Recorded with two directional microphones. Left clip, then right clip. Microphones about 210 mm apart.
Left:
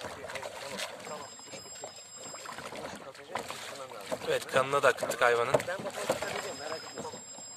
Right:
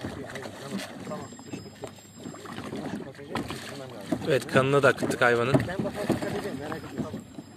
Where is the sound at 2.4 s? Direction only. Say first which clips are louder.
Right 4 dB; centre (ahead or behind).